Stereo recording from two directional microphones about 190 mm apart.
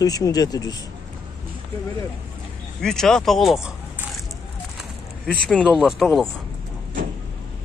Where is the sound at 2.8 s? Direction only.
5° left (ahead or behind).